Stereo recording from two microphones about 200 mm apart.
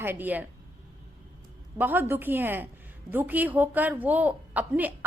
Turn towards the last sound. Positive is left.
turn(degrees=-10)  # may be behind; listen again after turning